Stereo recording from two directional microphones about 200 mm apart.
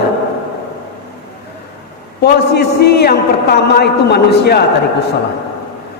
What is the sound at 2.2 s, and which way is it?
A man's voice, 55° left (ahead or behind).